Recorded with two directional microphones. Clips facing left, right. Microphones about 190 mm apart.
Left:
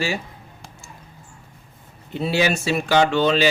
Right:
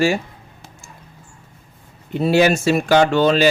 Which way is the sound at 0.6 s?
5° right (ahead or behind).